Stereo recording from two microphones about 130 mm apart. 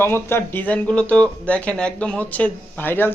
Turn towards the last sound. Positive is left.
turn(degrees=15)  # may be behind; listen again after turning